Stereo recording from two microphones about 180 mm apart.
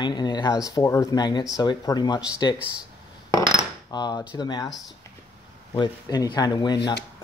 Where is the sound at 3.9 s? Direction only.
20° left (ahead or behind).